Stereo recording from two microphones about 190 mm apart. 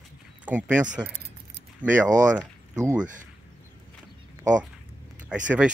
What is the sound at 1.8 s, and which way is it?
Speech, 45° right (ahead or behind).